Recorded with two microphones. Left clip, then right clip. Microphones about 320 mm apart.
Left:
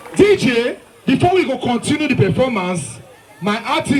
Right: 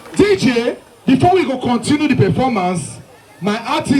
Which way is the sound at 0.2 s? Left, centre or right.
Right.